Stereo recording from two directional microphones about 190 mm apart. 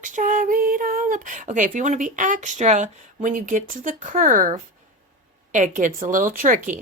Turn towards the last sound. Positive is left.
turn(degrees=-45)  # may be behind; listen again after turning